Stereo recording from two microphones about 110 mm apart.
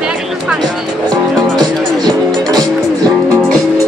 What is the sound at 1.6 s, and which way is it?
Music, 40° right (ahead or behind).